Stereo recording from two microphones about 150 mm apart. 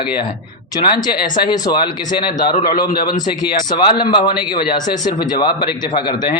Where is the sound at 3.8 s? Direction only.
30° left (ahead or behind).